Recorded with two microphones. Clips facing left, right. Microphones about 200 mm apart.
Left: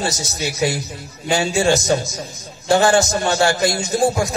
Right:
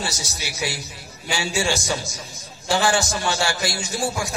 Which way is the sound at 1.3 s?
55° left (ahead or behind).